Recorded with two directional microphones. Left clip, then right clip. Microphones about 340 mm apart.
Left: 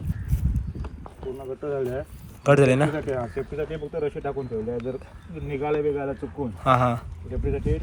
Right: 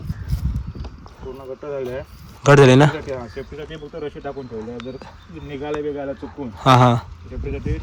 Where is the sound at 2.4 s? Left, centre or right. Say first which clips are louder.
Right 7 dB; right.